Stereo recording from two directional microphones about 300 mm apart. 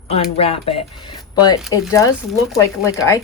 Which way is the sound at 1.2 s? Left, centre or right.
Centre.